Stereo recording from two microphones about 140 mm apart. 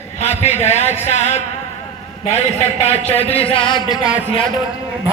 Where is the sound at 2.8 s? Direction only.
45° left (ahead or behind).